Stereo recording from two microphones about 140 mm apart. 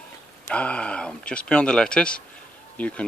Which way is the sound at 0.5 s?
10° left (ahead or behind).